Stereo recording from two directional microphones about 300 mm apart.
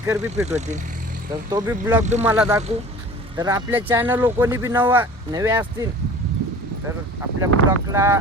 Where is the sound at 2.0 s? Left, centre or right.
Right.